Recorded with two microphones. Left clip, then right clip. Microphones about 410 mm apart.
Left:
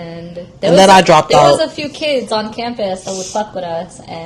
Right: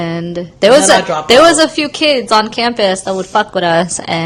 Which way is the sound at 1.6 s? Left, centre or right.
Right.